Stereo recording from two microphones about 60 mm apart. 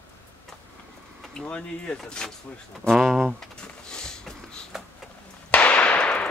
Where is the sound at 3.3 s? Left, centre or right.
Centre.